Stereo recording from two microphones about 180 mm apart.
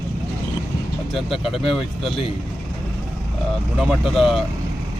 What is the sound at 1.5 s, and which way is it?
Speech, 30° left (ahead or behind).